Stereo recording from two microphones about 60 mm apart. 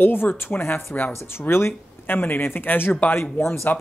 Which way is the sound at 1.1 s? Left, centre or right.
Left.